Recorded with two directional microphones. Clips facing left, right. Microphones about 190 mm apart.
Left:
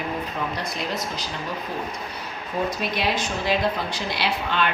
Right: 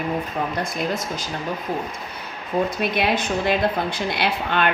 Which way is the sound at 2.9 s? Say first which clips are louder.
Right 4 dB; 55° right (ahead or behind).